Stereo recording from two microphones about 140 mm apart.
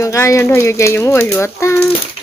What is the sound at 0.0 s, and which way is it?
Speech, 20° left (ahead or behind).